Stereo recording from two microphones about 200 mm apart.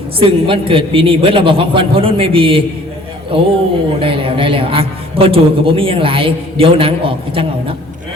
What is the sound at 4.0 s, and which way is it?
A man's voice, 25° right (ahead or behind).